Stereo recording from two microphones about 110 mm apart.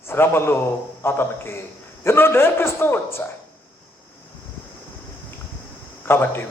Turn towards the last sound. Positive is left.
turn(degrees=20)  # may be behind; listen again after turning